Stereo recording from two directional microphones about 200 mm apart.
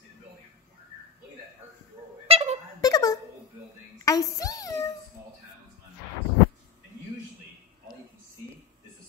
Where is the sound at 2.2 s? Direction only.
30° right (ahead or behind).